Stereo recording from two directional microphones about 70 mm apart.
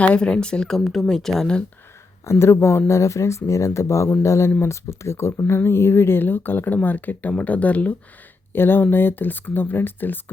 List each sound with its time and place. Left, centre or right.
0.0 s speech: centre
2.2 s speech: left